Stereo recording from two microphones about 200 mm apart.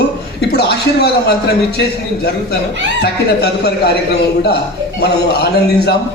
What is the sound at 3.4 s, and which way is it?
Speech, 55° left (ahead or behind).